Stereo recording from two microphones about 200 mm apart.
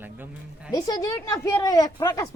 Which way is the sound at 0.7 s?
20° left (ahead or behind).